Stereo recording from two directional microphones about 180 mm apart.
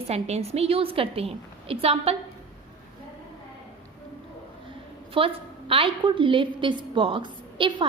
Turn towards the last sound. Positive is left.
turn(degrees=-25)  # may be behind; listen again after turning